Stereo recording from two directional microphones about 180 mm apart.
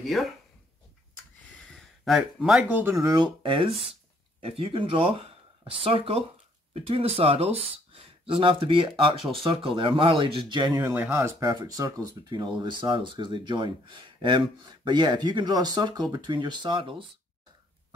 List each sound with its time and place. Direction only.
0.0 s speech: centre (ahead or behind)
1.7 s speech: centre (ahead or behind); by 11.0 s 20° right (ahead or behind)
11.0 s speech: 10° right (ahead or behind)